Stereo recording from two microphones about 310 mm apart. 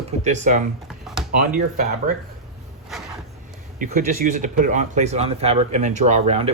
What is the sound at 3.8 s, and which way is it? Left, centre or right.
Speech, right.